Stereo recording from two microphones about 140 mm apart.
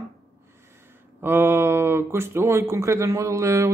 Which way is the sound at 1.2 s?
15° right (ahead or behind).